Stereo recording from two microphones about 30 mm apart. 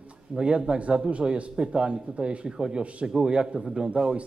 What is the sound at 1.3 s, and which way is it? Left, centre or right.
Speech, right.